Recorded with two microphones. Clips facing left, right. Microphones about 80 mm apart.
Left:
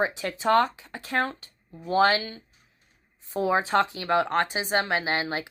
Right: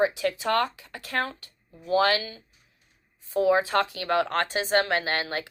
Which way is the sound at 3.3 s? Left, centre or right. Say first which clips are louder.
Right 1 dB; left.